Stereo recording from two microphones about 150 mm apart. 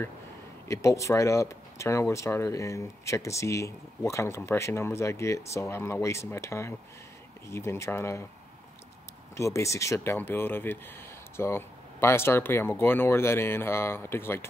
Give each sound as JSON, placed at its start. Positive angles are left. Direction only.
{"t": 0.7, "sound": "speech", "side_deg": 20}
{"t": 9.4, "sound": "speech", "side_deg": 20}